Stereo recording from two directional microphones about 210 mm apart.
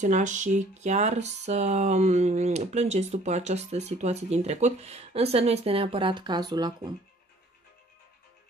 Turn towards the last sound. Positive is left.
turn(degrees=-20)  # may be behind; listen again after turning